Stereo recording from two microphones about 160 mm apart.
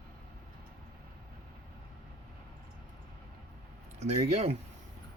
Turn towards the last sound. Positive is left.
turn(degrees=-40)  # may be behind; listen again after turning